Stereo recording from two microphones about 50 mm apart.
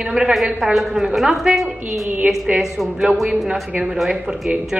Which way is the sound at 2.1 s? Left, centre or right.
Right.